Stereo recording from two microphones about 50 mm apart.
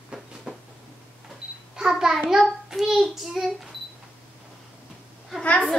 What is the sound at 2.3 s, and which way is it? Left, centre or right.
Child singing, centre.